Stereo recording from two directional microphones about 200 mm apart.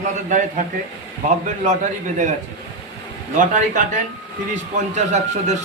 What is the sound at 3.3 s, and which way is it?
Speech, 40° right (ahead or behind).